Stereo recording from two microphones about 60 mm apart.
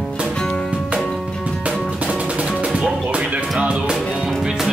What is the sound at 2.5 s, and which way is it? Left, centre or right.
Music, centre.